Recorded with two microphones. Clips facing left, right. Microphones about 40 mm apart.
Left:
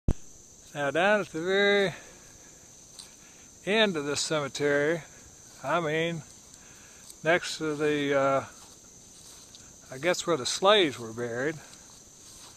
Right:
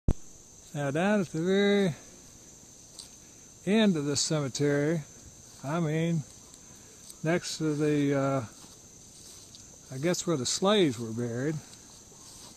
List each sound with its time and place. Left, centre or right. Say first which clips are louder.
0.7 s speech: left 3 dB; left
3.6 s speech: even; left
7.2 s speech: left 3 dB; left
9.8 s speech: left 2 dB; left